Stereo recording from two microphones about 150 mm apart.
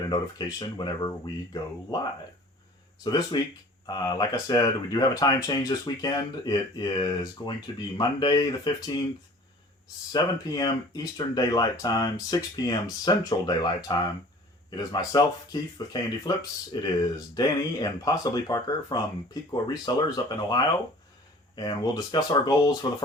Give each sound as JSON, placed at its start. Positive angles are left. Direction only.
{"t": 0.1, "sound": "speech", "side_deg": 30}
{"t": 3.0, "sound": "speech", "side_deg": 25}
{"t": 10.1, "sound": "speech", "side_deg": 25}
{"t": 15.1, "sound": "speech", "side_deg": 30}